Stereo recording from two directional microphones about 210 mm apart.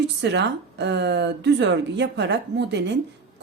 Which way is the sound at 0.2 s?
55° right (ahead or behind).